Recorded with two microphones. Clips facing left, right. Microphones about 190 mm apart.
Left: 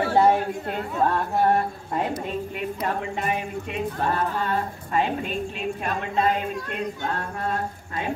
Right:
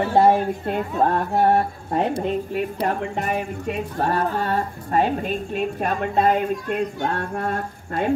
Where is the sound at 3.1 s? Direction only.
45° right (ahead or behind).